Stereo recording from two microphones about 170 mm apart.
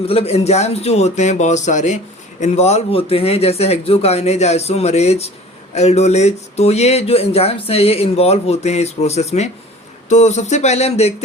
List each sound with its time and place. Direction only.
0.0 s speech: 35° left (ahead or behind)